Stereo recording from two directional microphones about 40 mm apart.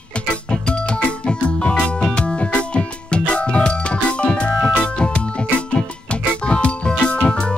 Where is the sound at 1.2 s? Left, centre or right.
Left.